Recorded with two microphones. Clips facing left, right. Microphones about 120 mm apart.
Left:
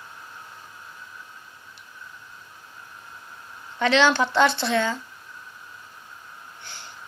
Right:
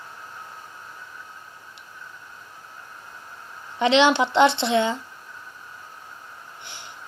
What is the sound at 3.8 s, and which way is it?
Speech, 20° right (ahead or behind).